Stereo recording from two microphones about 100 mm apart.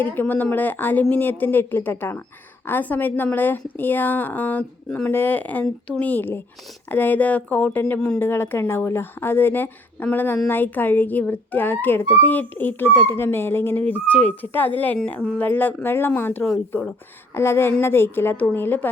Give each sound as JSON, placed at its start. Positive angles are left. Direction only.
{"t": 0.0, "sound": "speech", "side_deg": 20}
{"t": 8.2, "sound": "speech", "side_deg": 20}